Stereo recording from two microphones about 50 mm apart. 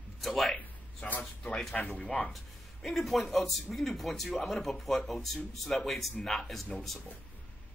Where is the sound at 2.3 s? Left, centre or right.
Centre.